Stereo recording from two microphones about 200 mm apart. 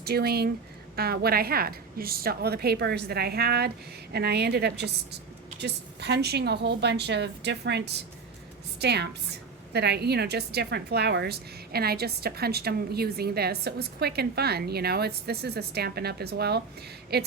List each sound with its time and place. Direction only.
0.0 s a woman's voice: 50° right (ahead or behind)